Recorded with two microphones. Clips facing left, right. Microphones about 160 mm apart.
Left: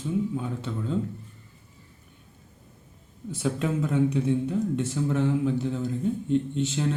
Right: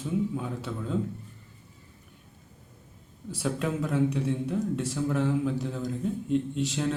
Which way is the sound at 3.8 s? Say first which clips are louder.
Left 3 dB; 5° right (ahead or behind).